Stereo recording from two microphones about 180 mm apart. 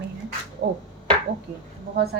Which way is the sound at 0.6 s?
70° right (ahead or behind).